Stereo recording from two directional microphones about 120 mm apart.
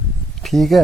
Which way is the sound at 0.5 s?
Centre (ahead or behind).